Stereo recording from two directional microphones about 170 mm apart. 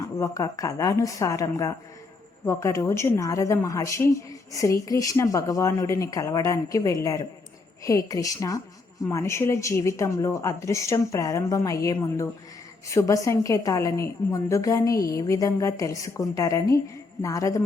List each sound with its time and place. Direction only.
0.0 s a woman's voice: 20° left (ahead or behind)